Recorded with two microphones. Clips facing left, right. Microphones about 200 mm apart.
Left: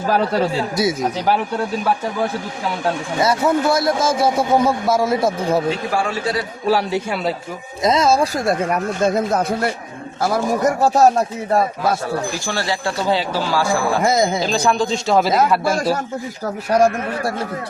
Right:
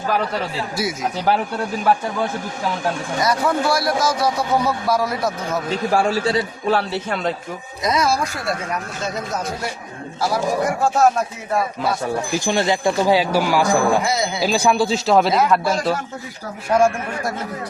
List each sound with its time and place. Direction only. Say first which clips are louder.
3.2 s a man's voice: left 3 dB; 25° left (ahead or behind)
6.1 s a man's voice: right 3 dB; 30° right (ahead or behind)
6.7 s speech: left 4 dB; 10° left (ahead or behind)
7.9 s a man's voice: left 4 dB; 25° left (ahead or behind)
8.4 s speech: left 6 dB; 55° left (ahead or behind)
10.2 s a man's voice: left 2 dB; 45° left (ahead or behind)
12.5 s speech: right 7 dB; 20° right (ahead or behind)
14.0 s a man's voice: left 5 dB; 45° left (ahead or behind)
14.4 s speech: right 1 dB; 10° right (ahead or behind)
15.3 s a man's voice: left 1 dB; 45° left (ahead or behind)